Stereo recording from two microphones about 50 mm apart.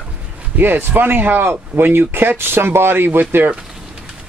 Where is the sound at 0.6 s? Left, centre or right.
Right.